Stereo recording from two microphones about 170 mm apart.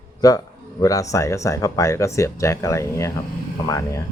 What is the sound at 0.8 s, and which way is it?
Speech, 20° left (ahead or behind).